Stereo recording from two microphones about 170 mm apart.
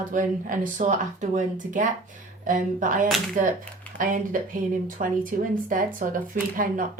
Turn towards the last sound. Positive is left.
turn(degrees=-55)  # may be behind; listen again after turning